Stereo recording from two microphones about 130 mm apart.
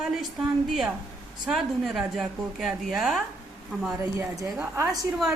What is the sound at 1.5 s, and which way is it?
A woman's voice, centre (ahead or behind).